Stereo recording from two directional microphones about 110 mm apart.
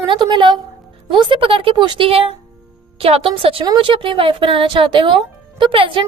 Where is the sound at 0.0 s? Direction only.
45° right (ahead or behind).